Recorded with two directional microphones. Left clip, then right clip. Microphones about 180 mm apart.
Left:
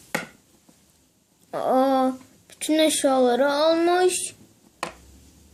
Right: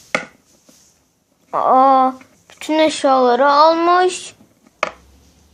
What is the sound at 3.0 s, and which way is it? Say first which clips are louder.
Speech: right 9 dB; 60° right (ahead or behind).